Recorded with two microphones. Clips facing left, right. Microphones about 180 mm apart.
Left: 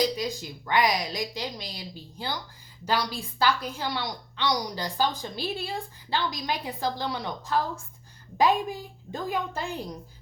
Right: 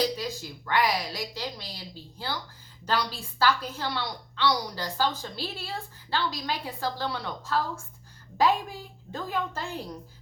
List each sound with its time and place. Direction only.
0.0 s a woman's voice: 15° left (ahead or behind)
9.1 s a woman's voice: 15° left (ahead or behind)